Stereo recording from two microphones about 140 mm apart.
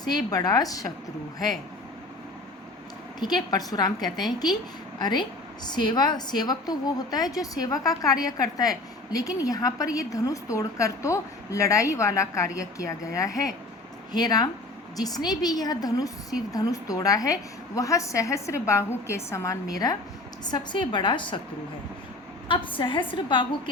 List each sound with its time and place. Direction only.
0.0 s a woman's voice: 30° left (ahead or behind)
3.2 s a woman's voice: 30° left (ahead or behind)
22.4 s a woman's voice: 35° left (ahead or behind)